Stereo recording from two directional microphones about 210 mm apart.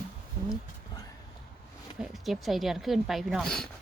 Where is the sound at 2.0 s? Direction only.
Centre (ahead or behind).